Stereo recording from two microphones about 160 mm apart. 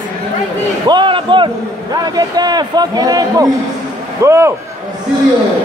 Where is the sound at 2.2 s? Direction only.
25° right (ahead or behind).